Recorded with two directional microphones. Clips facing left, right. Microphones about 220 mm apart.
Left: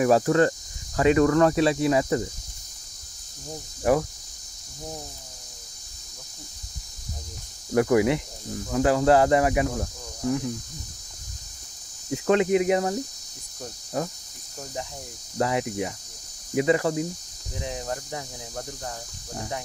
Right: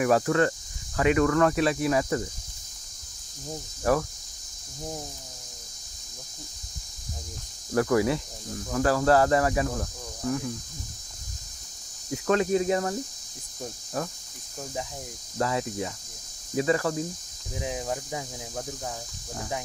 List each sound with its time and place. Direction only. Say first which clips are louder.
0.0 s speech: left 3 dB; 30° left (ahead or behind)
3.9 s speech: left 3 dB; 20° left (ahead or behind)
7.7 s speech: left 3 dB; 20° left (ahead or behind)
12.1 s speech: left 3 dB; 20° left (ahead or behind)
14.0 s speech: left 3 dB; 20° left (ahead or behind)
15.3 s speech: left 3 dB; 20° left (ahead or behind)
17.6 s cricket: right 1 dB; 5° right (ahead or behind)